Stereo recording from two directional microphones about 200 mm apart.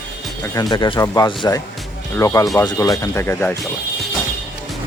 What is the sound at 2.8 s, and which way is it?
Speech, 15° left (ahead or behind).